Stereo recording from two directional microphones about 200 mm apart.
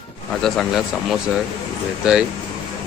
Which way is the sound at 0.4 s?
Centre (ahead or behind).